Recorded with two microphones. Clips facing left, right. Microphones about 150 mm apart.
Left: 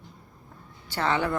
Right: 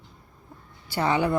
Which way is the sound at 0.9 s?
10° right (ahead or behind).